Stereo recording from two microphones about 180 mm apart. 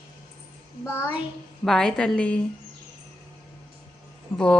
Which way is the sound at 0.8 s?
15° left (ahead or behind).